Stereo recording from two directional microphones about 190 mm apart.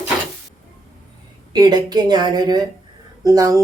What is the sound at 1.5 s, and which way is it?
A woman's voice, 20° right (ahead or behind).